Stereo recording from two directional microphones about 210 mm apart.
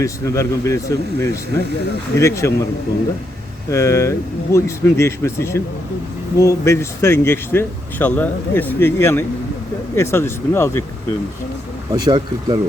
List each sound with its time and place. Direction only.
0.0 s speech: 15° left (ahead or behind)
3.7 s speech: 15° left (ahead or behind)
11.9 s speech: 20° right (ahead or behind)